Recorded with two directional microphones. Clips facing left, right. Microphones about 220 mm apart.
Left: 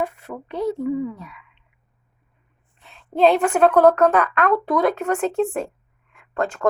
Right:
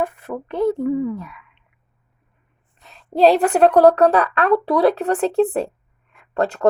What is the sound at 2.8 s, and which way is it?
Speech, 40° right (ahead or behind).